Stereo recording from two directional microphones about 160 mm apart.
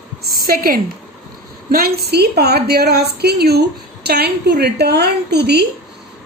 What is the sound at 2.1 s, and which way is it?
A woman's voice, 90° right.